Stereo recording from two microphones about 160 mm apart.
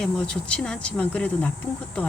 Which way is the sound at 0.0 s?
5° left (ahead or behind).